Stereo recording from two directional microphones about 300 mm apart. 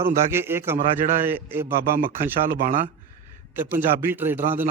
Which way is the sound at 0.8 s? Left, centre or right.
Right.